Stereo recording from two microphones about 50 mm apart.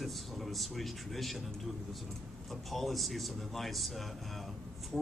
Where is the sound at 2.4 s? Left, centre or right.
Centre.